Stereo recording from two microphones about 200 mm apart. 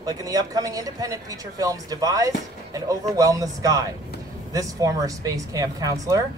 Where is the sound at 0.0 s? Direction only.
20° right (ahead or behind).